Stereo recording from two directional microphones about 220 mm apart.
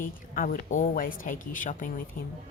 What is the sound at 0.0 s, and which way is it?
A woman's voice, 35° left (ahead or behind).